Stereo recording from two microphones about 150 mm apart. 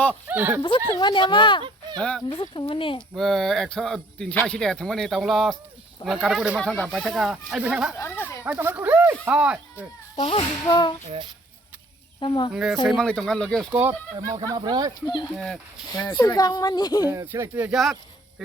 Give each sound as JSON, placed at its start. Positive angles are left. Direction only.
{"t": 0.3, "sound": "speech", "side_deg": -10}
{"t": 0.9, "sound": "speech", "side_deg": 30}
{"t": 2.0, "sound": "speech", "side_deg": 5}
{"t": 2.3, "sound": "speech", "side_deg": 35}
{"t": 3.2, "sound": "speech", "side_deg": 0}
{"t": 7.9, "sound": "a sound", "side_deg": 15}
{"t": 8.4, "sound": "speech", "side_deg": -15}
{"t": 10.2, "sound": "speech", "side_deg": 30}
{"t": 12.2, "sound": "speech", "side_deg": 30}
{"t": 12.5, "sound": "speech", "side_deg": -5}
{"t": 13.7, "sound": "speech", "side_deg": -10}
{"t": 14.2, "sound": "speech", "side_deg": -25}
{"t": 15.0, "sound": "a child's voice", "side_deg": 25}
{"t": 17.1, "sound": "speech", "side_deg": -15}